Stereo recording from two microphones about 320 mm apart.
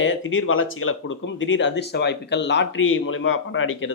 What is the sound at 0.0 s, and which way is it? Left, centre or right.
Speech, left.